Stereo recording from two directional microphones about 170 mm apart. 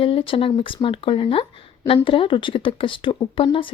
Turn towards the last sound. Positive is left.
turn(degrees=30)  # may be behind; listen again after turning